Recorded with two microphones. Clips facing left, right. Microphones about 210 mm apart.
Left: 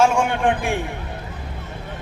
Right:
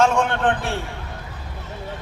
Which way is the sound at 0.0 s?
10° left (ahead or behind).